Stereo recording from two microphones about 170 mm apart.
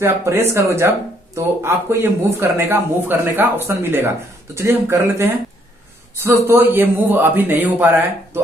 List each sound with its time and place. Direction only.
0.0 s a man's voice: 15° right (ahead or behind)